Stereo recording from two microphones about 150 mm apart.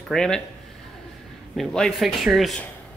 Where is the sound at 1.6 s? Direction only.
Centre (ahead or behind).